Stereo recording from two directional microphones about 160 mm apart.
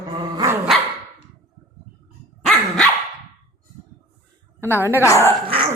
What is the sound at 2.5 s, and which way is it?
Dog, 5° left (ahead or behind).